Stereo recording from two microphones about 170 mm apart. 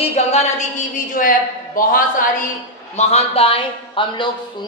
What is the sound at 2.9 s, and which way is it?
Speech, 35° left (ahead or behind).